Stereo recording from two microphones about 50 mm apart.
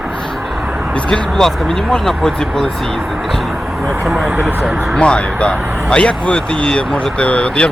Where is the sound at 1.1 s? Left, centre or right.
Centre.